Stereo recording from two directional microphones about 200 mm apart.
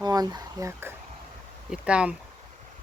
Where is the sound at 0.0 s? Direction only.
20° right (ahead or behind).